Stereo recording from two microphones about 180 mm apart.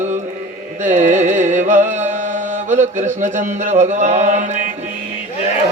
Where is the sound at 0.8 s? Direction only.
45° right (ahead or behind).